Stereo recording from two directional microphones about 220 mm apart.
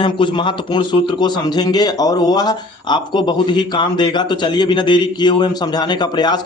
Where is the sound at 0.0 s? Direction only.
20° left (ahead or behind).